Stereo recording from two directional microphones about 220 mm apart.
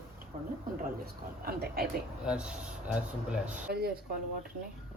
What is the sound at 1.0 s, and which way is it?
Speech, 45° right (ahead or behind).